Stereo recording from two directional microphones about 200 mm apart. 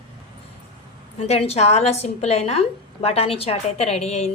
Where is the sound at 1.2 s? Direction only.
30° left (ahead or behind).